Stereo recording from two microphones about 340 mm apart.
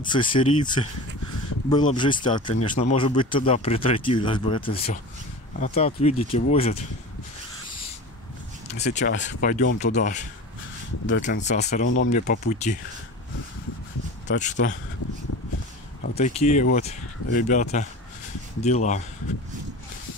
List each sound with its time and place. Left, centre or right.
0.0 s speech: centre
8.6 s speech: centre
11.2 s speech: left
14.2 s speech: left
16.2 s speech: centre